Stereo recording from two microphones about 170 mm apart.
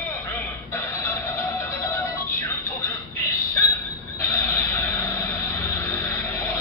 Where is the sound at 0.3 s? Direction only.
15° left (ahead or behind).